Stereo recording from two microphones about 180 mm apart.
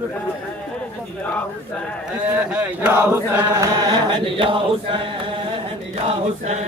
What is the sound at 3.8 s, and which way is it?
Chant, 25° right (ahead or behind).